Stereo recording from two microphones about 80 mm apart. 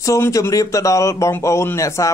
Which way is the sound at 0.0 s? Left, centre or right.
Left.